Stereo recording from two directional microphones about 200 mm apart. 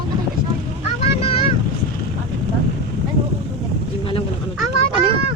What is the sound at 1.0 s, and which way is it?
Vehicle, 30° left (ahead or behind).